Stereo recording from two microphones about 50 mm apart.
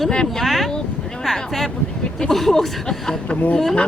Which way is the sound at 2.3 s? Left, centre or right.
Centre.